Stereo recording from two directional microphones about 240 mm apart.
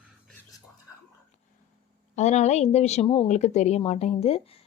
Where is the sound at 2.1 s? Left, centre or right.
Left.